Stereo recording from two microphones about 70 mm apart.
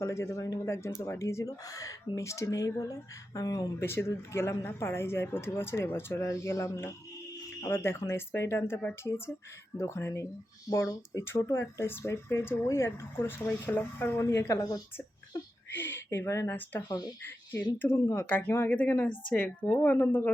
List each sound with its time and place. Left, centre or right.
0.0 s a woman's voice: left
3.8 s a woman's voice: left
6.2 s a woman's voice: left
15.7 s speech: left
17.2 s a woman's voice: left
19.7 s speech: left